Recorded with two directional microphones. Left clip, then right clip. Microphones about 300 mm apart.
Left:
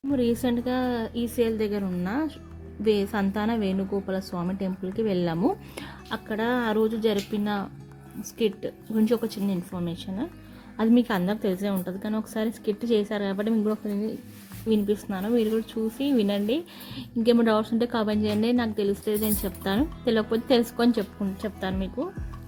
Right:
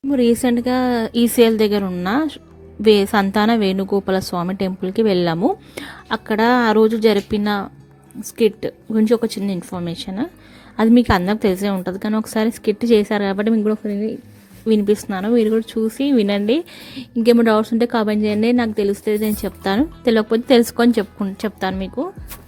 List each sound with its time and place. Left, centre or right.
0.1 s speech: right